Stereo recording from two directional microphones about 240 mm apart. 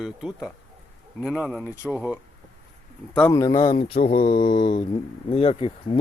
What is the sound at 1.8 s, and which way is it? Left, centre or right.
Speech, centre.